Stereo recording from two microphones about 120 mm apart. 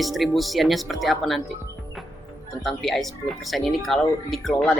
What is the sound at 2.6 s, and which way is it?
Speech, centre (ahead or behind).